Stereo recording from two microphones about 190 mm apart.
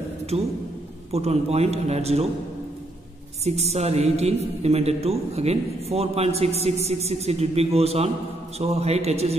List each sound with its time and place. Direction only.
0.3 s a man's voice: 35° right (ahead or behind)
3.4 s a man's voice: 35° right (ahead or behind)